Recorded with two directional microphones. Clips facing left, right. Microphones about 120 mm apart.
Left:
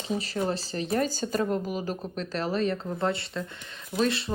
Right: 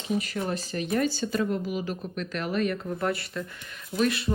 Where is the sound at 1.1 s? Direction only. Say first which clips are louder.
Even; 45° left (ahead or behind); by 4.3 s 25° left (ahead or behind).